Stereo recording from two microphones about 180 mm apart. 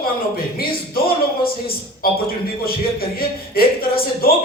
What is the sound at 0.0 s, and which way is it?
Speech, 55° left (ahead or behind).